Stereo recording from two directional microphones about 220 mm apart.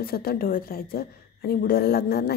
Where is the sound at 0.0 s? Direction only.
45° left (ahead or behind).